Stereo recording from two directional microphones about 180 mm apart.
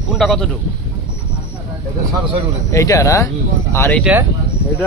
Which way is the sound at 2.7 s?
20° left (ahead or behind).